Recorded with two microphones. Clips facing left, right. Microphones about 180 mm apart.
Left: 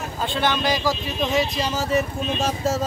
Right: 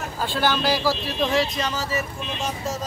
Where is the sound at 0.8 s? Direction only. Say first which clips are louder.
Even; 20° left (ahead or behind).